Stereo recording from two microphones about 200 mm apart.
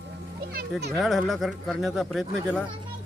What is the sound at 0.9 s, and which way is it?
Speech, centre (ahead or behind).